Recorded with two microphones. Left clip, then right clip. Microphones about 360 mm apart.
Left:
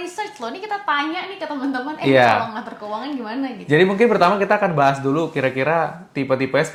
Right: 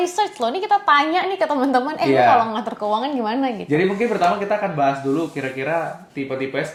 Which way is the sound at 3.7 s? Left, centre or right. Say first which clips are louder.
Left 6 dB; left.